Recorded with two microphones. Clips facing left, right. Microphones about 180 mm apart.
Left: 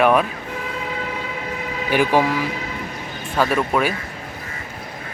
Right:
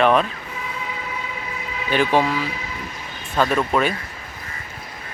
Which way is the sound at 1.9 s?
10° left (ahead or behind).